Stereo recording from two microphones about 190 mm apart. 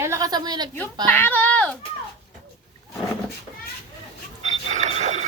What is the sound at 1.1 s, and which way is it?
Speech, 10° left (ahead or behind).